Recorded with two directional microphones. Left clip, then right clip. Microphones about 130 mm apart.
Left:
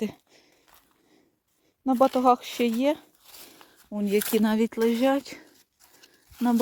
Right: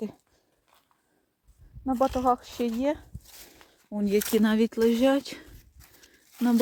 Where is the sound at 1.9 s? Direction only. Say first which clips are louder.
Left 4 dB; 40° left (ahead or behind); by 3.5 s 25° left (ahead or behind).